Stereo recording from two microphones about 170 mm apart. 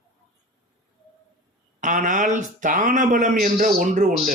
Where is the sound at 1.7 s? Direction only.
50° right (ahead or behind).